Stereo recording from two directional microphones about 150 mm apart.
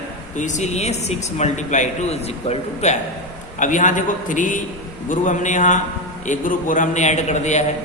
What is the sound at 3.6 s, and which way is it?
A man's voice, 55° left (ahead or behind).